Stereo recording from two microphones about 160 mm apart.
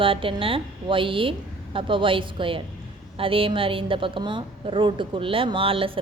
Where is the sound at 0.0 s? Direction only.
35° right (ahead or behind).